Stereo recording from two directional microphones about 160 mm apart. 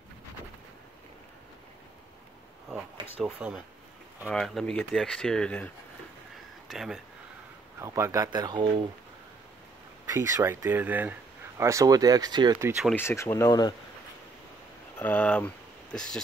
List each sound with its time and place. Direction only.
3.3 s speech: 10° right (ahead or behind)
4.3 s speech: 5° left (ahead or behind)
6.7 s speech: centre (ahead or behind)
7.8 s speech: 15° right (ahead or behind)
10.0 s speech: 20° right (ahead or behind)
12.9 s speech: 15° left (ahead or behind)
15.0 s speech: 10° left (ahead or behind)